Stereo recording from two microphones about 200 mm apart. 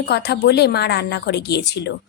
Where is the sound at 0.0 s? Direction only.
55° left (ahead or behind).